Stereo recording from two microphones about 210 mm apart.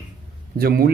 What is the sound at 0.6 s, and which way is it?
Speech, 45° right (ahead or behind).